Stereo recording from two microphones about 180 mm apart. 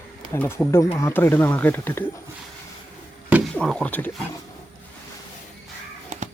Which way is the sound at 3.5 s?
5° left (ahead or behind).